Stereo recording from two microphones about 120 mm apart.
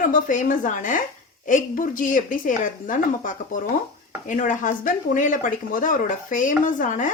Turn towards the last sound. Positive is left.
turn(degrees=90)